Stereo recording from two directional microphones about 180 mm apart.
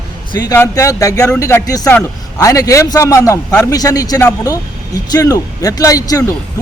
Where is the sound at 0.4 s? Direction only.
15° left (ahead or behind).